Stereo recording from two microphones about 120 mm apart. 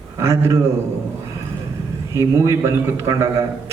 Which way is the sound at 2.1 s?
25° right (ahead or behind).